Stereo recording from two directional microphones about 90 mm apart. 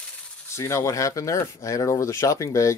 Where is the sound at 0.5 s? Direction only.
35° left (ahead or behind).